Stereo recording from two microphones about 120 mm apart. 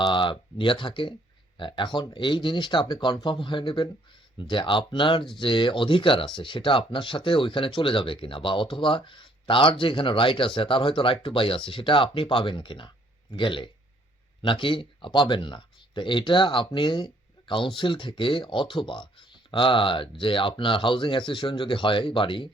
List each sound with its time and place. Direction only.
0.0 s speech: 45° left (ahead or behind)